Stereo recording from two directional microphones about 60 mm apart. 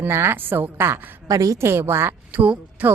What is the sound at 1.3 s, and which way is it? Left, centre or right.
Speech, right.